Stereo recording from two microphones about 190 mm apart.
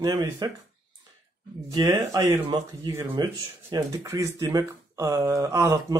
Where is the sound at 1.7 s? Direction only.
20° right (ahead or behind).